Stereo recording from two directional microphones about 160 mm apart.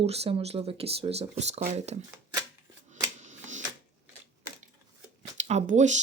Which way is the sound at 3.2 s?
50° right (ahead or behind).